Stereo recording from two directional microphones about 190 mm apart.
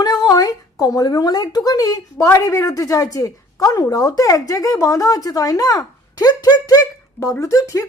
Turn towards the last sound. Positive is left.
turn(degrees=15)  # may be behind; listen again after turning